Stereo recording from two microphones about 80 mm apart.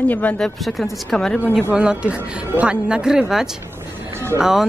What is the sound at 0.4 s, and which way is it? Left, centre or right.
Speech, centre.